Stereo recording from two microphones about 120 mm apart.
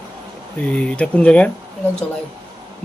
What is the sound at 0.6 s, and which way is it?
Speech, 10° left (ahead or behind).